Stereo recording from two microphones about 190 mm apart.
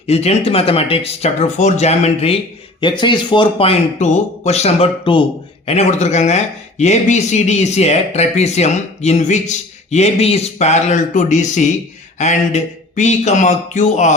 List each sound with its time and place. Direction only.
0.1 s speech: 35° left (ahead or behind)